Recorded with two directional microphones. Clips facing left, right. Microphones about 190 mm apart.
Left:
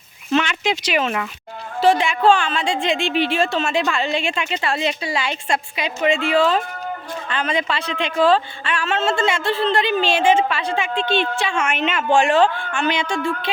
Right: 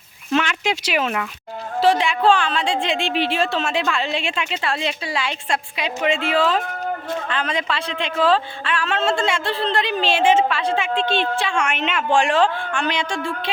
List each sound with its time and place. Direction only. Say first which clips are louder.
0.3 s a man's voice: left 1 dB; 5° right (ahead or behind)